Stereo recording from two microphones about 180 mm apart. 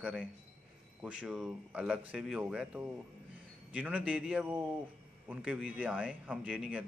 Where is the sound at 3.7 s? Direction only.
10° right (ahead or behind).